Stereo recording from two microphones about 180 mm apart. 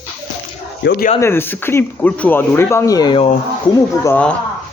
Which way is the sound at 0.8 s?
70° left (ahead or behind).